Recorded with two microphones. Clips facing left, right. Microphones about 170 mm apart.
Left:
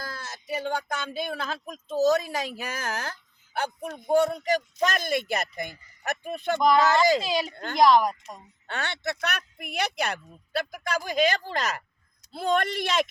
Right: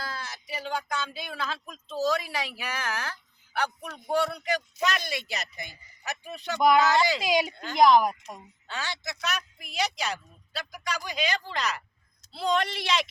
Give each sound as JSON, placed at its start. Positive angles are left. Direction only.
{"t": 0.0, "sound": "a sound", "side_deg": 50}
{"t": 1.1, "sound": "a man's voice", "side_deg": 50}
{"t": 3.8, "sound": "speech", "side_deg": 25}
{"t": 4.1, "sound": "a man's voice", "side_deg": 45}
{"t": 6.6, "sound": "speech", "side_deg": -10}
{"t": 7.5, "sound": "speech", "side_deg": 55}
{"t": 7.8, "sound": "speech", "side_deg": 0}
{"t": 8.6, "sound": "a man's voice", "side_deg": 60}